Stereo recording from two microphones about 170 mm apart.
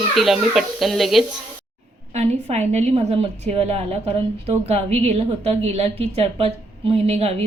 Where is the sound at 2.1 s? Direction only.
40° right (ahead or behind).